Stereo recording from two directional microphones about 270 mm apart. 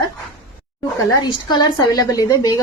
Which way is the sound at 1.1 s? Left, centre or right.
Centre.